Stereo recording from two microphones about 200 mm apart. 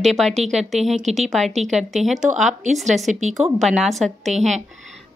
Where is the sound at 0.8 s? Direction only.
Centre (ahead or behind).